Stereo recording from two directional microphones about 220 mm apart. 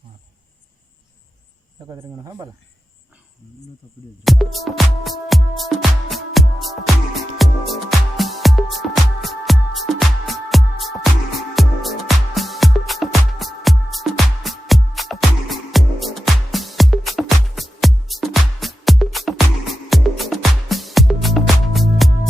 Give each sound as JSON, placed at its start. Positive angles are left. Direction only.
{"t": 1.9, "sound": "speech", "side_deg": -15}
{"t": 4.2, "sound": "music", "side_deg": 0}